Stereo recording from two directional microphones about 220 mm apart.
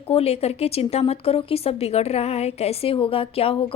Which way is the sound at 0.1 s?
25° left (ahead or behind).